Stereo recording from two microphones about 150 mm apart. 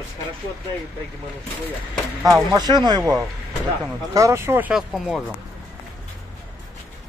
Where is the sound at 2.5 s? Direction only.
25° right (ahead or behind).